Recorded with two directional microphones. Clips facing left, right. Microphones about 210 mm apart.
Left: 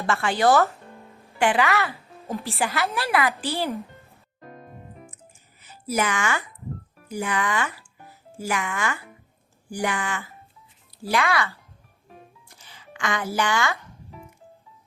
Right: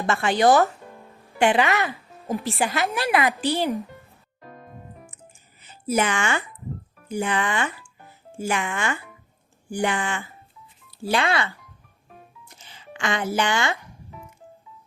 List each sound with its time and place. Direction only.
0.0 s a woman's voice: 20° right (ahead or behind)
5.9 s speech: 30° right (ahead or behind)
12.5 s music: 25° right (ahead or behind)